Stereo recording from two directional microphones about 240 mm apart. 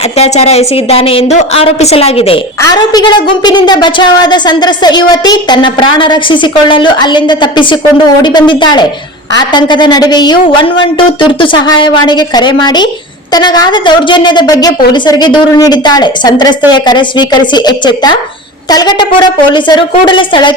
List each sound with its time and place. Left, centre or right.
0.2 s a woman's voice: left